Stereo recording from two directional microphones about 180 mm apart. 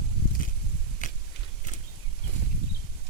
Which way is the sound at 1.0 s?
45° left (ahead or behind).